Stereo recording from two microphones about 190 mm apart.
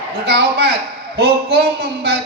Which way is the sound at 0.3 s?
60° right (ahead or behind).